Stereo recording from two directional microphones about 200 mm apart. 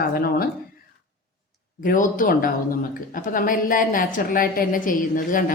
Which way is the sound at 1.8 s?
40° left (ahead or behind).